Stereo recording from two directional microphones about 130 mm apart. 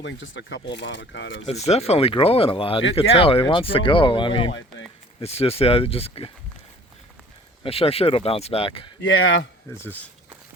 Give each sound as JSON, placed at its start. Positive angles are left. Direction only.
{"t": 1.5, "sound": "speech", "side_deg": 55}
{"t": 5.2, "sound": "speech", "side_deg": 50}
{"t": 7.6, "sound": "speech", "side_deg": 50}
{"t": 9.6, "sound": "speech", "side_deg": 15}